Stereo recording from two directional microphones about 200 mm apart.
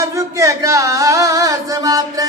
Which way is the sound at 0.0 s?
15° right (ahead or behind).